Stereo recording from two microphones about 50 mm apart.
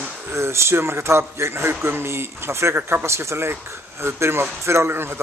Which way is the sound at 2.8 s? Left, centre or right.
Right.